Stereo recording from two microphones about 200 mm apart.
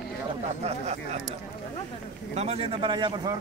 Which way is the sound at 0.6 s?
30° right (ahead or behind).